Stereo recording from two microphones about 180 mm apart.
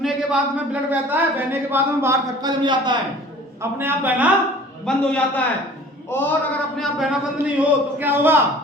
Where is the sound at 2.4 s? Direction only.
25° right (ahead or behind).